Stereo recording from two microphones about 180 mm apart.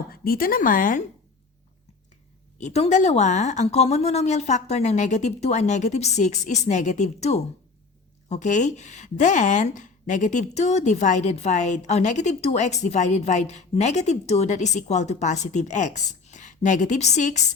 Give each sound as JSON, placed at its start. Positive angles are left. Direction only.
{"t": 0.1, "sound": "speech", "side_deg": 55}
{"t": 2.6, "sound": "a woman's voice", "side_deg": 40}